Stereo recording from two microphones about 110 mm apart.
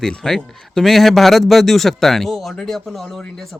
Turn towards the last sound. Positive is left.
turn(degrees=5)  # may be behind; listen again after turning